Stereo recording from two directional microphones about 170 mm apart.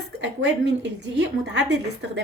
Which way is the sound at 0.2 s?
90° right.